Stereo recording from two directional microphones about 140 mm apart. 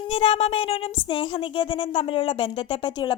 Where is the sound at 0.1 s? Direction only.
40° left (ahead or behind).